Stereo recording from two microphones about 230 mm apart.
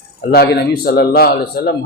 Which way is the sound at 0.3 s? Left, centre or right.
Left.